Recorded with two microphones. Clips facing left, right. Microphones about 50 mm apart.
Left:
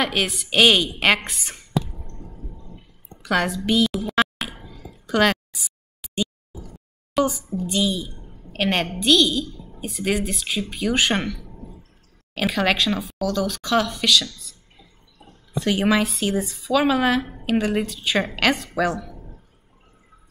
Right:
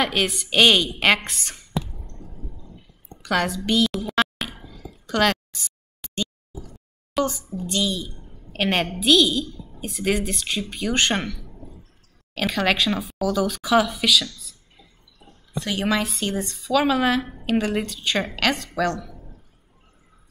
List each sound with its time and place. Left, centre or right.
0.0 s speech: centre
2.0 s squish: left
3.2 s a sound: centre
7.2 s a child's voice: centre
15.6 s speech: centre